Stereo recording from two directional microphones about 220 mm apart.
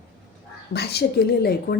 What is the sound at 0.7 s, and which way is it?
A woman's voice, 45° left (ahead or behind).